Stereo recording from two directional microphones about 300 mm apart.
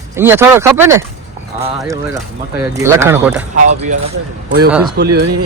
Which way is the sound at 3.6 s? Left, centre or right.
Right.